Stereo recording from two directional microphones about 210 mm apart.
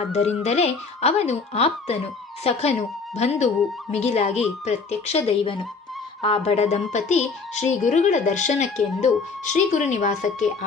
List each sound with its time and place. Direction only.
0.0 s speech: 30° left (ahead or behind)